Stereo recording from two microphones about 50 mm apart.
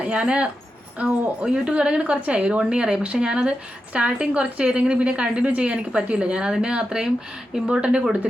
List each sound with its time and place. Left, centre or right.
0.0 s a woman's voice: right